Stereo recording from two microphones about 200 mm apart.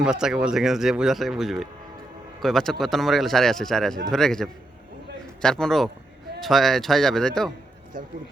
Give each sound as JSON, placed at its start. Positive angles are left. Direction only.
{"t": 0.0, "sound": "speech", "side_deg": -5}
{"t": 7.9, "sound": "speech", "side_deg": -45}